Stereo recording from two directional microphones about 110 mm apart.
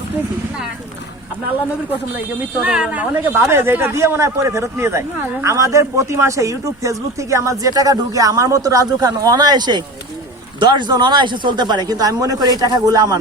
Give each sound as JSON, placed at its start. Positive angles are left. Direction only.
{"t": 2.6, "sound": "speech", "side_deg": -10}